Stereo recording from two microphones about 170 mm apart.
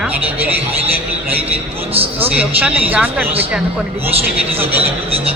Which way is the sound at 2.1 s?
10° right (ahead or behind).